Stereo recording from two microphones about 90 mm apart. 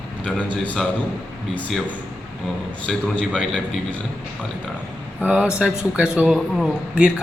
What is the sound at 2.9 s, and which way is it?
Speech, 5° left (ahead or behind).